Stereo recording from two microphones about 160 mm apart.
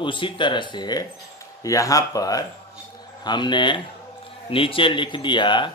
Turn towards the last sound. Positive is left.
turn(degrees=30)  # may be behind; listen again after turning